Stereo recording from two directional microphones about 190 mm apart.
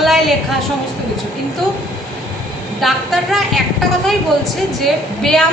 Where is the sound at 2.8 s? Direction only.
Centre (ahead or behind).